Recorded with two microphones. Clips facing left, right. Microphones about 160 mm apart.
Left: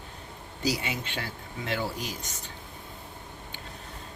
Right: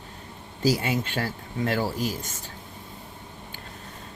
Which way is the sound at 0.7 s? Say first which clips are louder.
Right 6 dB; 50° right (ahead or behind).